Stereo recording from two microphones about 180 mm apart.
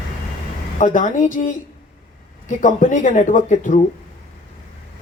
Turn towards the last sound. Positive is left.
turn(degrees=45)  # may be behind; listen again after turning